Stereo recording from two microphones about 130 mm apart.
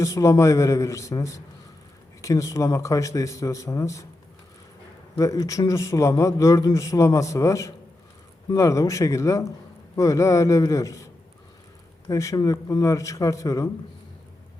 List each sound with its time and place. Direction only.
0.0 s a man's voice: 25° left (ahead or behind)
5.1 s a man's voice: 25° left (ahead or behind)